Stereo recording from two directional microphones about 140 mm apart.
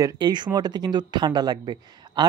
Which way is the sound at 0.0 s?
35° right (ahead or behind).